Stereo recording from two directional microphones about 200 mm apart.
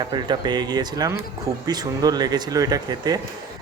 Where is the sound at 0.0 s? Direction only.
20° right (ahead or behind).